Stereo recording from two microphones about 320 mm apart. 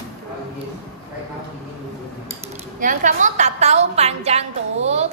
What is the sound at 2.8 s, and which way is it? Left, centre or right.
A woman's voice, right.